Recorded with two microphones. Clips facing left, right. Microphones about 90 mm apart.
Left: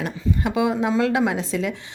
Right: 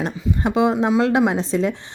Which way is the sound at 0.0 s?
25° right (ahead or behind).